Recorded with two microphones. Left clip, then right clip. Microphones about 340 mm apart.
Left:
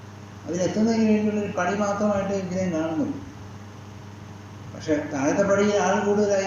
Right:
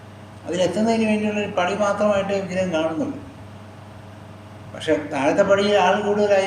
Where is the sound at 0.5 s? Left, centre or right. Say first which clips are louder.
Right 4 dB; right.